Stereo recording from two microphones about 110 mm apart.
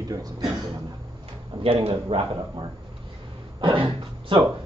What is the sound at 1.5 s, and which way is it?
Speech, 50° right (ahead or behind).